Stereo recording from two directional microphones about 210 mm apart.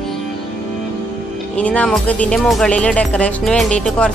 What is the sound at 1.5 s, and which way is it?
Speech, 5° left (ahead or behind).